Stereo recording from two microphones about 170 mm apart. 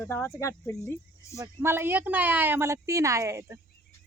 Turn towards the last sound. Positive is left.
turn(degrees=-15)  # may be behind; listen again after turning